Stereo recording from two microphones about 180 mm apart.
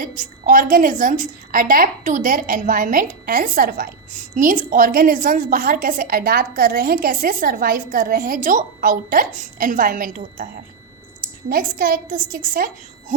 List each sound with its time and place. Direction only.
0.0 s a woman's voice: 45° right (ahead or behind)